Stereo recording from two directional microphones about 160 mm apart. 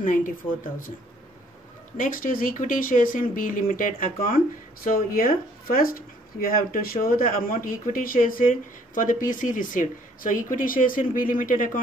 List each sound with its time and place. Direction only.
0.0 s speech: 55° left (ahead or behind)
2.0 s speech: 60° left (ahead or behind)